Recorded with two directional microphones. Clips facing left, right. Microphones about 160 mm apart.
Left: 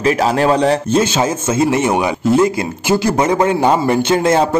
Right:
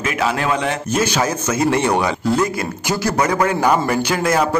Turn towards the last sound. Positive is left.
turn(degrees=25)  # may be behind; listen again after turning